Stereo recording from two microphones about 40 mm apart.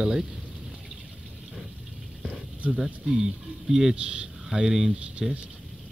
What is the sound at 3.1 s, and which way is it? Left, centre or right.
Speech, centre.